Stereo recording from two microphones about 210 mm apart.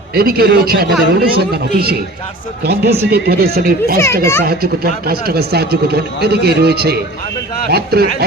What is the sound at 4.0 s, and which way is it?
Speech, 10° left (ahead or behind).